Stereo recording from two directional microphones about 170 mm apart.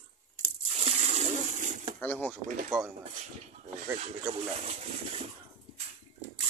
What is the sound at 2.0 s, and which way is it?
Speech, 10° left (ahead or behind).